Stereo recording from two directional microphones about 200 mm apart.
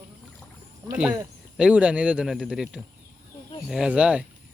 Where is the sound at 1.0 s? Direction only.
5° right (ahead or behind).